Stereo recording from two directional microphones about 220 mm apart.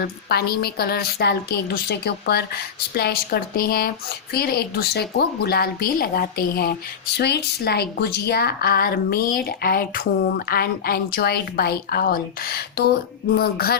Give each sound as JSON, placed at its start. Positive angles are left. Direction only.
{"t": 0.0, "sound": "speech", "side_deg": 45}